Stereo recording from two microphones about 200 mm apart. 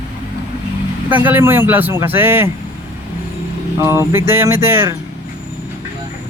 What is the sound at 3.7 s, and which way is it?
Speech, 15° right (ahead or behind).